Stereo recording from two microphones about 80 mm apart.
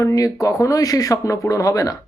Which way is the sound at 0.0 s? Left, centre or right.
Left.